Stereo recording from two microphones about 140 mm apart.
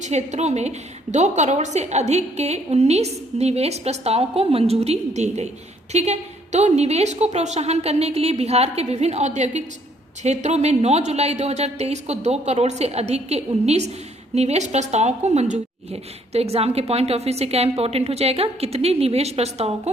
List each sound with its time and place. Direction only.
0.0 s speech: 55° right (ahead or behind)